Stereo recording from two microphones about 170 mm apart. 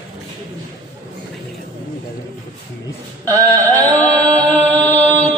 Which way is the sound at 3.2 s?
20° right (ahead or behind).